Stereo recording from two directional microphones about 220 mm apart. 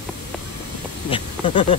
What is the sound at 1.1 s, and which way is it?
Speech, 25° left (ahead or behind).